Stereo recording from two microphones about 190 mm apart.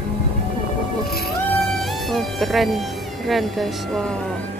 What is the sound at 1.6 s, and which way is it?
Speech, centre (ahead or behind).